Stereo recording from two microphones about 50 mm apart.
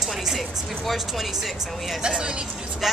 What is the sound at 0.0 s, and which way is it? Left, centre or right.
Speech, centre.